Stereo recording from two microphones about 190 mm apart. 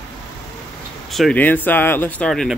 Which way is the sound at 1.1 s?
Centre (ahead or behind).